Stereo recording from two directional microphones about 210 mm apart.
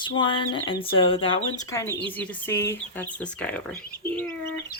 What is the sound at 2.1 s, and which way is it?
Speech, 10° left (ahead or behind).